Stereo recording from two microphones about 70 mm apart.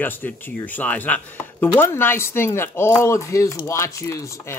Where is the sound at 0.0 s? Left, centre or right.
Left.